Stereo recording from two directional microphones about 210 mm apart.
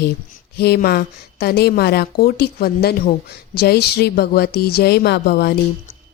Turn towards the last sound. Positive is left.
turn(degrees=50)  # may be behind; listen again after turning